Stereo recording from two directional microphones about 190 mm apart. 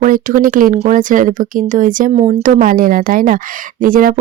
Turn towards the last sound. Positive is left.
turn(degrees=-45)  # may be behind; listen again after turning